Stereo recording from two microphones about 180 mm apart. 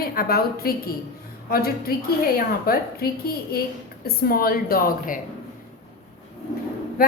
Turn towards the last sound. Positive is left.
turn(degrees=55)  # may be behind; listen again after turning